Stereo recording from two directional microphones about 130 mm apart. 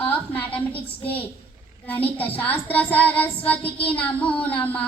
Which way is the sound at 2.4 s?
15° left (ahead or behind).